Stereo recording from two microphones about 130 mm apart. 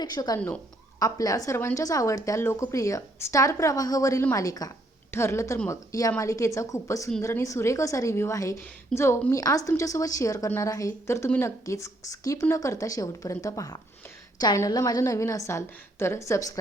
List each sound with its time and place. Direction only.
0.0 s a woman's voice: 30° left (ahead or behind)
0.3 s speech: 10° left (ahead or behind)
0.9 s a woman's voice: 25° left (ahead or behind)